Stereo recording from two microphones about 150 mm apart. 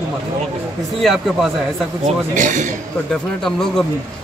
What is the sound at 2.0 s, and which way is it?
Speech, 55° right (ahead or behind).